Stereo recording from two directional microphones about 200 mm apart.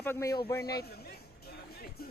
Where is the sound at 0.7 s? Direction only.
50° left (ahead or behind).